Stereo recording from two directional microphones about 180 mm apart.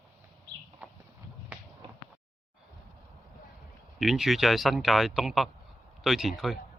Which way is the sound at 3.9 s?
Centre (ahead or behind).